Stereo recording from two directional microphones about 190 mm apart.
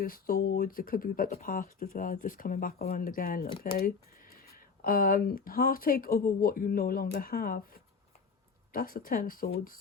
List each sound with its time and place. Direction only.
0.0 s speech: 50° left (ahead or behind)